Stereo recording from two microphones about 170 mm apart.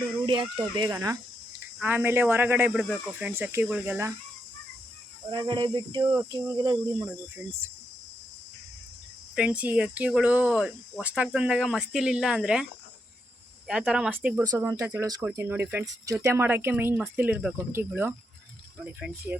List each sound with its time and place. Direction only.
0.4 s speech: 25° right (ahead or behind)
1.8 s speech: 10° right (ahead or behind)
5.3 s speech: 25° right (ahead or behind)
9.3 s speech: 5° right (ahead or behind)
13.7 s speech: 5° right (ahead or behind)